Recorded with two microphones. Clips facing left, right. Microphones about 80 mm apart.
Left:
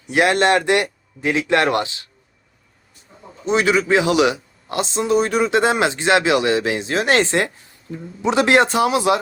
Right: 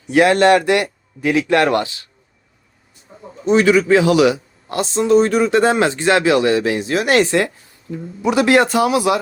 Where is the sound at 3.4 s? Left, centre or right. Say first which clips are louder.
Right 4 dB; left.